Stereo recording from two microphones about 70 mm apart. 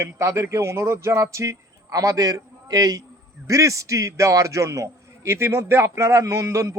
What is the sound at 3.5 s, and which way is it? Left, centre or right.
A man's voice, right.